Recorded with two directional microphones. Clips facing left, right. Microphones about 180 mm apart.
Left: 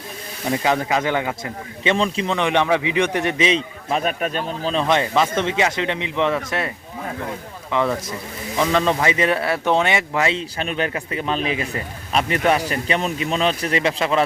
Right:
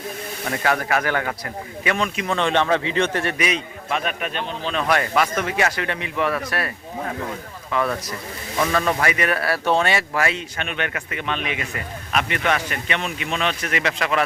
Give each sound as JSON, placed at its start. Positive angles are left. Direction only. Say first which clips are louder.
{"t": 0.5, "sound": "speech", "louder": "left 2 dB", "side_deg": 20}
{"t": 1.8, "sound": "a man's voice", "louder": "left 4 dB", "side_deg": 25}
{"t": 2.3, "sound": "a man's voice", "louder": "even", "side_deg": 15}
{"t": 7.7, "sound": "a man's voice", "louder": "left 2 dB", "side_deg": 20}